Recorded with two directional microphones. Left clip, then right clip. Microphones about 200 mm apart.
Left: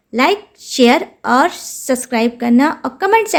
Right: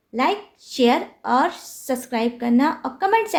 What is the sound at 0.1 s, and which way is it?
A woman's voice, 40° left (ahead or behind).